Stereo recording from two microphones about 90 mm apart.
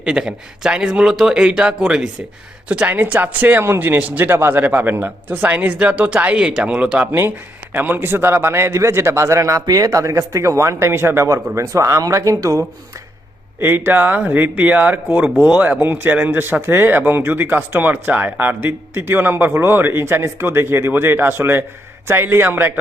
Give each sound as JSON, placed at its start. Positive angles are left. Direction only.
{"t": 0.0, "sound": "a man's voice", "side_deg": -5}
{"t": 7.2, "sound": "a man's voice", "side_deg": -25}
{"t": 13.6, "sound": "speech", "side_deg": -25}